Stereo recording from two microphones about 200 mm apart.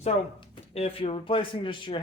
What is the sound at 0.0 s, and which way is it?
Speech, 25° left (ahead or behind).